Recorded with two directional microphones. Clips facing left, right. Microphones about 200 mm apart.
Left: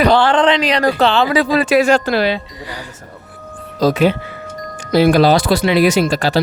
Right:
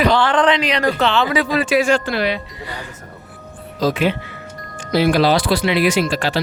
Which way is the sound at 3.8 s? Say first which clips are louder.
Left 4 dB; 40° left (ahead or behind).